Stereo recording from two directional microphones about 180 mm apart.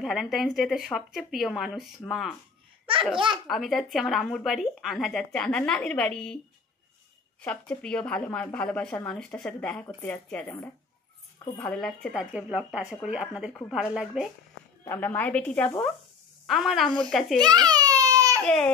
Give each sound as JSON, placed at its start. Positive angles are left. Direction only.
{"t": 0.0, "sound": "speech", "side_deg": 0}
{"t": 3.4, "sound": "speech", "side_deg": 0}
{"t": 7.4, "sound": "speech", "side_deg": 5}
{"t": 14.9, "sound": "speech", "side_deg": 10}
{"t": 17.4, "sound": "baby cry", "side_deg": -20}
{"t": 18.4, "sound": "baby cry", "side_deg": 5}